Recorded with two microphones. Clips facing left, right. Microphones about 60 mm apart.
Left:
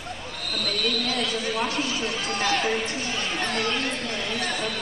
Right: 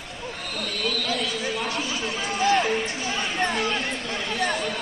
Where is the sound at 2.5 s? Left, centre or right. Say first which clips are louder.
Right 2 dB; centre.